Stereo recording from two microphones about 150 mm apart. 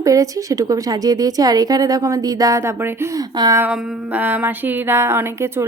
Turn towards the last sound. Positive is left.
turn(degrees=-15)  # may be behind; listen again after turning